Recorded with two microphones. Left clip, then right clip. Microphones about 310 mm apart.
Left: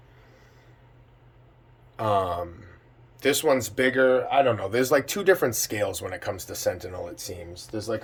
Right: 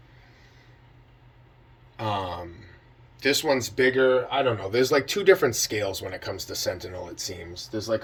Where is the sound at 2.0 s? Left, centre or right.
Centre.